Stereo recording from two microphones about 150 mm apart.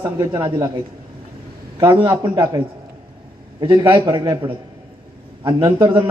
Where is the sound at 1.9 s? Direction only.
30° right (ahead or behind).